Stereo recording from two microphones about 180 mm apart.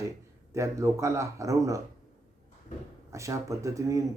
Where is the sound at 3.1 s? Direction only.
15° right (ahead or behind).